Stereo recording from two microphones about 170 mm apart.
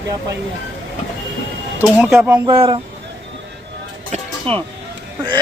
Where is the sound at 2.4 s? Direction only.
25° right (ahead or behind).